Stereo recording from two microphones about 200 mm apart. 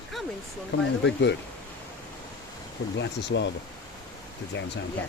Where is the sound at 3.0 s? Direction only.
60° left (ahead or behind).